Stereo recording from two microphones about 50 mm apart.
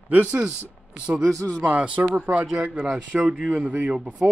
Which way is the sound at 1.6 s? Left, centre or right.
Right.